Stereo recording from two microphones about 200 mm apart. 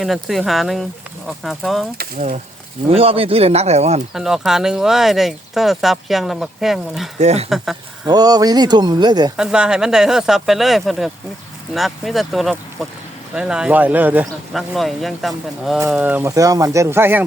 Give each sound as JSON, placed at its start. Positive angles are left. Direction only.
{"t": 0.0, "sound": "speech", "side_deg": 0}
{"t": 2.0, "sound": "speech", "side_deg": -35}
{"t": 4.1, "sound": "speech", "side_deg": 0}
{"t": 7.2, "sound": "speech", "side_deg": -35}
{"t": 7.5, "sound": "speech", "side_deg": 0}
{"t": 8.0, "sound": "speech", "side_deg": -20}
{"t": 9.4, "sound": "speech", "side_deg": -5}